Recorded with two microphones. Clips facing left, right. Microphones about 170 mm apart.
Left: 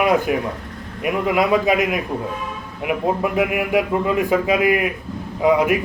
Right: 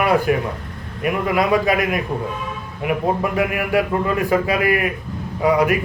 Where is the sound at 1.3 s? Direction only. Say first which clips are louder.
Left 1 dB; 15° left (ahead or behind).